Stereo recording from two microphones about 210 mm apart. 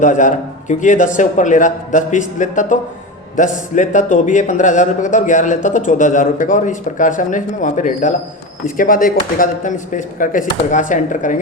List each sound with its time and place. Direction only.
0.0 s a man's voice: 35° left (ahead or behind)